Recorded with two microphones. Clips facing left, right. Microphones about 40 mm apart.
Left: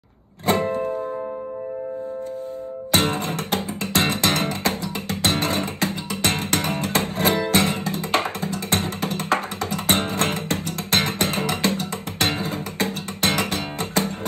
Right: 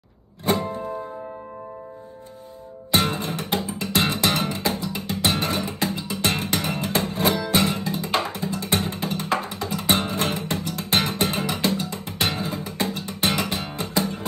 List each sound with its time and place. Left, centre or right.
0.5 s music: left
2.9 s music: left